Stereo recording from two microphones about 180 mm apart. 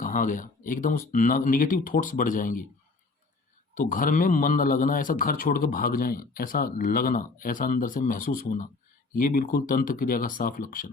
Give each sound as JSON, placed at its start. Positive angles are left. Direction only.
{"t": 0.0, "sound": "a man's voice", "side_deg": 50}
{"t": 3.8, "sound": "a man's voice", "side_deg": 50}